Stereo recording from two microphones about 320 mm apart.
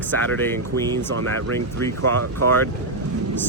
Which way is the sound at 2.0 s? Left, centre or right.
Right.